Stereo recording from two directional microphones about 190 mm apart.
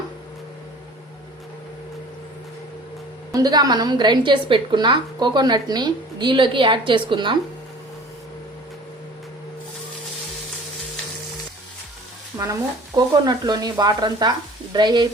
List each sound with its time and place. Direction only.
3.3 s a woman's voice: 20° right (ahead or behind)
12.3 s a woman's voice: 15° right (ahead or behind)